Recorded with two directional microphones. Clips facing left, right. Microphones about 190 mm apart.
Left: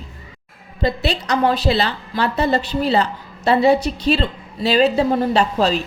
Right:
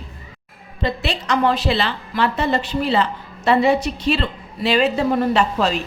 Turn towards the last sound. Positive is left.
turn(degrees=35)  # may be behind; listen again after turning